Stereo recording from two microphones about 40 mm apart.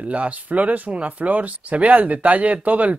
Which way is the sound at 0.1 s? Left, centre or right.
Right.